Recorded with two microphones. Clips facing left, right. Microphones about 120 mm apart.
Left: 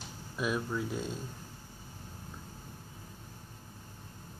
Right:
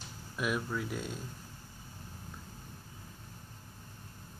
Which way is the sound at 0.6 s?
15° left (ahead or behind).